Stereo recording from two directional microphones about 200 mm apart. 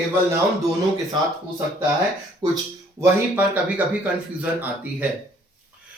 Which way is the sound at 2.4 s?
20° right (ahead or behind).